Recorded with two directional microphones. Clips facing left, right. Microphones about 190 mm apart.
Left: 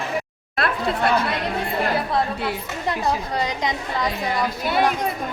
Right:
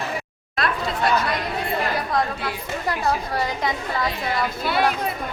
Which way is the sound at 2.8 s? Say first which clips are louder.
Left 1 dB; 20° left (ahead or behind).